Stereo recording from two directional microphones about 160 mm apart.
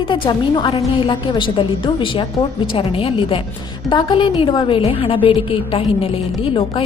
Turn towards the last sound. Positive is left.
turn(degrees=35)  # may be behind; listen again after turning